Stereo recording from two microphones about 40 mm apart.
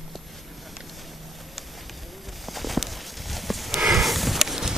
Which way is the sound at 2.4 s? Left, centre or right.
Centre.